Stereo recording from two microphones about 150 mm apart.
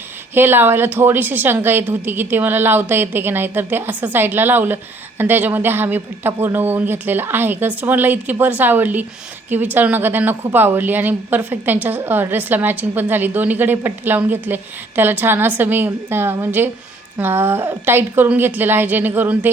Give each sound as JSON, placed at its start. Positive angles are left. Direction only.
{"t": 0.3, "sound": "a woman's voice", "side_deg": -15}